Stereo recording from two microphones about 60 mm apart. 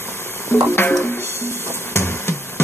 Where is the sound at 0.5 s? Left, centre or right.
Left.